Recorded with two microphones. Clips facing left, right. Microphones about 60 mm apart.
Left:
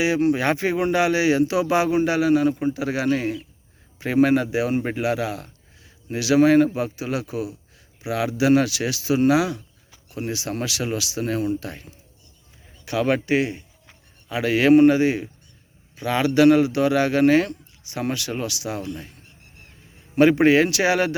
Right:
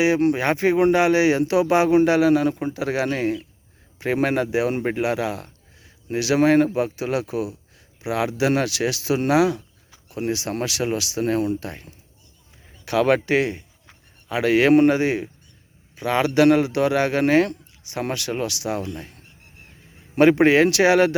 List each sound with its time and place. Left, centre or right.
0.0 s speech: right
1.9 s a man's voice: right
12.8 s a man's voice: right
20.1 s speech: right